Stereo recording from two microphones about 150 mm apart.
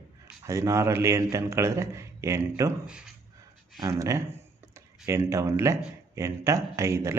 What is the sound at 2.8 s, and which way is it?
Speech, 5° right (ahead or behind).